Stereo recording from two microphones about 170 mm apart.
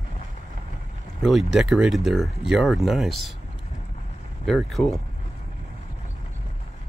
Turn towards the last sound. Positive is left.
turn(degrees=0)  # may be behind; listen again after turning